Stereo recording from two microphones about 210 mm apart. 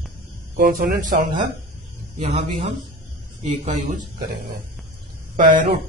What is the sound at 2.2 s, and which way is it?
Speech, 25° right (ahead or behind).